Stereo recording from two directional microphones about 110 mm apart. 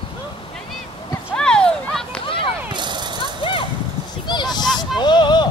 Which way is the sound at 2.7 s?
45° right (ahead or behind).